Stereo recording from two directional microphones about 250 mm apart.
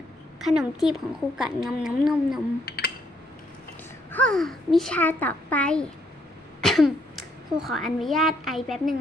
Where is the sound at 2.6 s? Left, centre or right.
Left.